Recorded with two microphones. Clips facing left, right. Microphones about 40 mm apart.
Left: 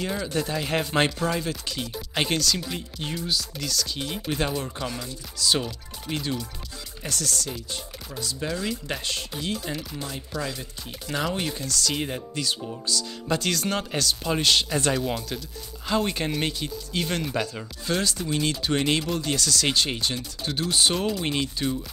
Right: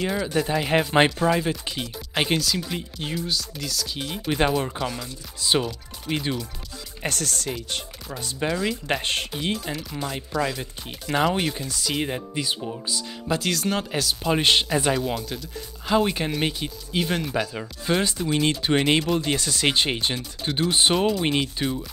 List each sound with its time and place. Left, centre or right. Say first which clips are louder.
0.0 s speech: right 3 dB; centre
4.4 s speech: right 8 dB; right
4.8 s speech: right 2 dB; centre
5.4 s speech: right 2 dB; right
7.0 s speech: right 2 dB; right
9.3 s speech: right 3 dB; right
10.6 s speech: right 3 dB; right
13.3 s speech: right 1 dB; centre
14.3 s speech: right 3 dB; right
14.7 s speech: right 2 dB; centre
15.0 s speech: right 1 dB; centre